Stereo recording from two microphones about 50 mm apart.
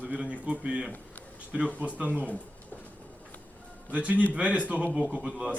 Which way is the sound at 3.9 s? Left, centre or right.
Right.